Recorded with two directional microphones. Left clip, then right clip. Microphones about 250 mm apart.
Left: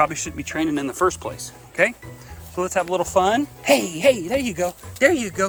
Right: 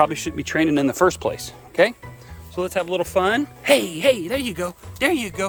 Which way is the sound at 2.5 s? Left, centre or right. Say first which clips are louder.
Left 1 dB; centre.